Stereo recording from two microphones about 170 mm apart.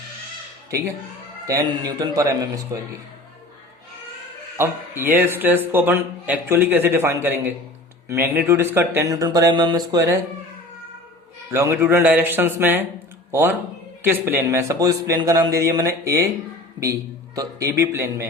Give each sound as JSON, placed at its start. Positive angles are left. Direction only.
{"t": 1.5, "sound": "speech", "side_deg": -20}
{"t": 4.5, "sound": "speech", "side_deg": -15}
{"t": 11.5, "sound": "speech", "side_deg": -15}